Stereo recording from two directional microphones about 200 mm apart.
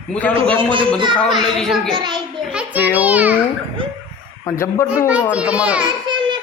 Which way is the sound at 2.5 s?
5° right (ahead or behind).